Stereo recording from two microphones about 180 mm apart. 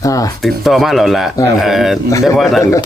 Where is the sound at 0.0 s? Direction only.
20° left (ahead or behind).